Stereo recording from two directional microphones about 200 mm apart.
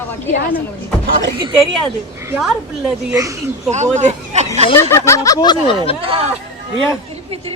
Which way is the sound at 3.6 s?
35° right (ahead or behind).